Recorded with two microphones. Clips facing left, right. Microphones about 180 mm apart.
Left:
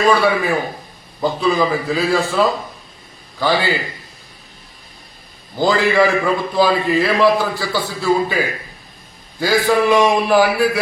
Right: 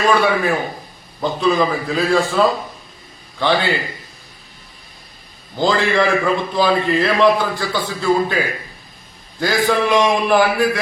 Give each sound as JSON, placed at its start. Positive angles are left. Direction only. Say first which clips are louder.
{"t": 0.1, "sound": "a man's voice", "louder": "left 1 dB", "side_deg": 0}
{"t": 5.5, "sound": "a man's voice", "louder": "left 2 dB", "side_deg": 5}